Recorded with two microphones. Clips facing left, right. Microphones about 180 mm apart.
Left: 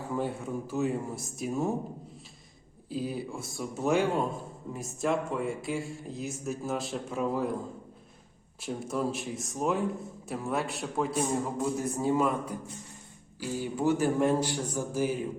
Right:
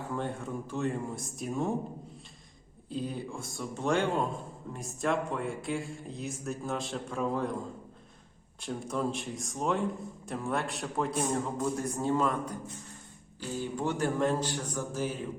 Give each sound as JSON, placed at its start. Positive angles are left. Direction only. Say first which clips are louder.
{"t": 0.1, "sound": "speech", "louder": "left 3 dB", "side_deg": 5}
{"t": 2.9, "sound": "speech", "louder": "left 2 dB", "side_deg": 5}
{"t": 8.6, "sound": "a man's voice", "louder": "left 1 dB", "side_deg": 5}